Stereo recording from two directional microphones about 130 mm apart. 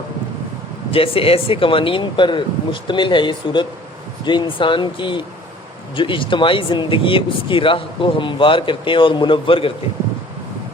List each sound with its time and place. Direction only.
0.9 s speech: 45° left (ahead or behind)